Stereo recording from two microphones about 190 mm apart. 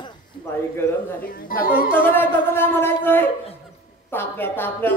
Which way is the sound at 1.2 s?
50° left (ahead or behind).